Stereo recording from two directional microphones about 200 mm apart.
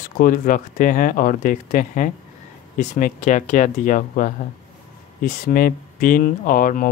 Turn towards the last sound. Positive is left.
turn(degrees=45)  # may be behind; listen again after turning